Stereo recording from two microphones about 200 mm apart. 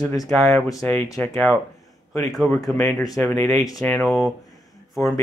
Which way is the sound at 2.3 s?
Centre (ahead or behind).